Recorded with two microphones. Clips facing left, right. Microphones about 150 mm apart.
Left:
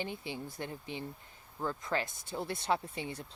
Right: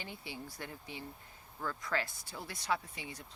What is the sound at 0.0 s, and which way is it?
Speech, 20° left (ahead or behind).